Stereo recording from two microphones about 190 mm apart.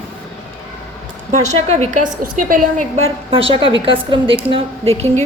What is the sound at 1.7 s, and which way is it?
A woman's voice, 40° right (ahead or behind).